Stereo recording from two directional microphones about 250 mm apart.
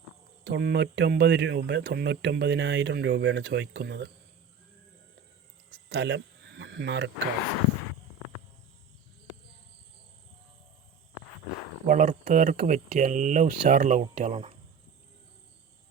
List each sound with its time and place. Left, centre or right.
0.4 s speech: right
5.7 s a sound: right
11.9 s speech: right